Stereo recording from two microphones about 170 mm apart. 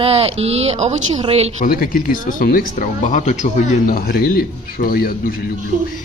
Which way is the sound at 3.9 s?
60° left (ahead or behind).